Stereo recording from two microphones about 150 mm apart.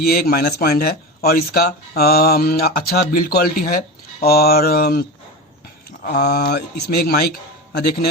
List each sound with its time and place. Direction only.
0.0 s speech: 90° left; by 3.8 s 70° left (ahead or behind)
4.2 s speech: 90° left
6.1 s speech: 90° left